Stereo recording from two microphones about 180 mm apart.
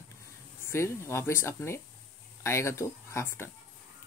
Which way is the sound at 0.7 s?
15° left (ahead or behind).